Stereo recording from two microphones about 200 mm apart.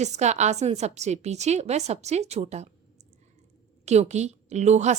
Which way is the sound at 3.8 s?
35° right (ahead or behind).